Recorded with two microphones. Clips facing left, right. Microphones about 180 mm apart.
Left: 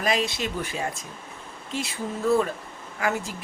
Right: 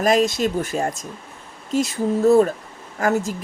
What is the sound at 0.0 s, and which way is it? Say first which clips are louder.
Speech: right 8 dB; 45° right (ahead or behind).